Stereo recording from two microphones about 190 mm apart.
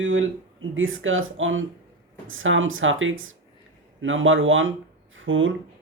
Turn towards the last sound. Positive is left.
turn(degrees=-90)